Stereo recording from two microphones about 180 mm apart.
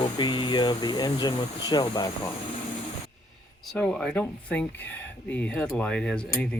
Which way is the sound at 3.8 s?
5° left (ahead or behind).